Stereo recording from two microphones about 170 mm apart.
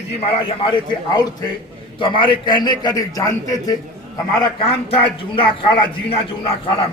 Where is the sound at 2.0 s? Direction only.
30° left (ahead or behind).